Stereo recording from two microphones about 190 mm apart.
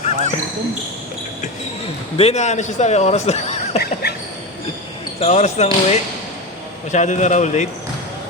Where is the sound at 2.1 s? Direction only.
35° left (ahead or behind).